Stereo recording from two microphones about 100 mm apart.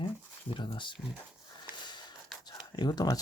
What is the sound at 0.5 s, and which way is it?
Speech, 50° left (ahead or behind).